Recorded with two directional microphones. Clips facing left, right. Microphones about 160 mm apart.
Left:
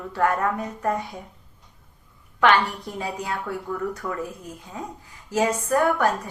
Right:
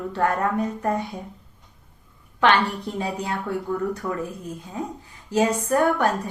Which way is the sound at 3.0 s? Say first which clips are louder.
Right 1 dB; 25° right (ahead or behind).